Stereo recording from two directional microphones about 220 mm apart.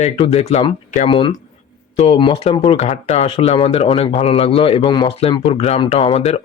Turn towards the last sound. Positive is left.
turn(degrees=25)  # may be behind; listen again after turning